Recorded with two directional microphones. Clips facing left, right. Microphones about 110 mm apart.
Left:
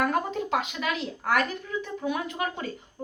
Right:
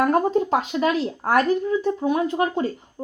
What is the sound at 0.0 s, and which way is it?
Speech, 35° right (ahead or behind).